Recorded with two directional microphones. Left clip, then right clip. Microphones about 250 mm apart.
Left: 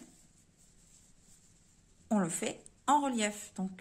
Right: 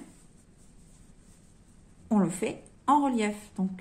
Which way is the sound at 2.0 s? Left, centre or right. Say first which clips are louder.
Right 5 dB; left.